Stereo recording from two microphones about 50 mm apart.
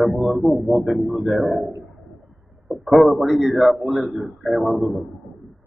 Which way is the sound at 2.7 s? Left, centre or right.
Centre.